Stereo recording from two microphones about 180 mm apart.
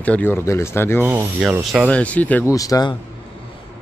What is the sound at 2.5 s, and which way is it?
Speech, 20° left (ahead or behind).